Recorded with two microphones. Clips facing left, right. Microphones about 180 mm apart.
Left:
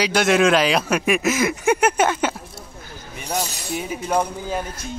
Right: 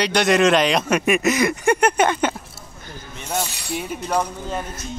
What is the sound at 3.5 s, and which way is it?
Chink, 45° left (ahead or behind).